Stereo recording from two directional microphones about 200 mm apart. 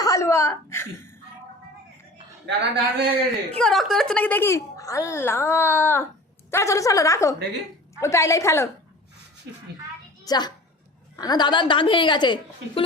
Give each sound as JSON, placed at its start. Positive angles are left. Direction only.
{"t": 0.0, "sound": "a sound", "side_deg": 15}
{"t": 2.5, "sound": "a man's voice", "side_deg": -60}
{"t": 3.6, "sound": "a woman's voice", "side_deg": 0}
{"t": 10.2, "sound": "a woman's voice", "side_deg": 20}